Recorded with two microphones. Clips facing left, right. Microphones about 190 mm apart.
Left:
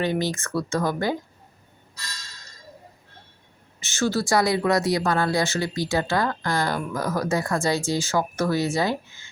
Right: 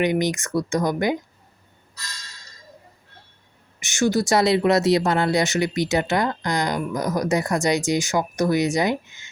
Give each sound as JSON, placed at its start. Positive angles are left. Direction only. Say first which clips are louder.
{"t": 0.0, "sound": "speech", "louder": "right 4 dB", "side_deg": -15}
{"t": 3.8, "sound": "speech", "louder": "right 4 dB", "side_deg": -15}